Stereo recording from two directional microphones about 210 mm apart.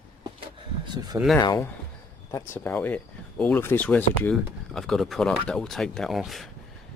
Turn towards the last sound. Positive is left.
turn(degrees=0)  # may be behind; listen again after turning